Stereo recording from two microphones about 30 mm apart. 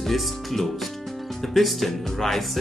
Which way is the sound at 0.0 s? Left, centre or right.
Centre.